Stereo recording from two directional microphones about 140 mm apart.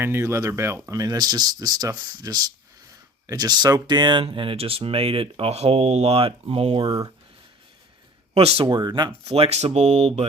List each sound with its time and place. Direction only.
0.0 s speech: 20° right (ahead or behind); by 6.9 s 40° right (ahead or behind)
8.4 s speech: 45° right (ahead or behind)
9.3 s speech: 50° right (ahead or behind)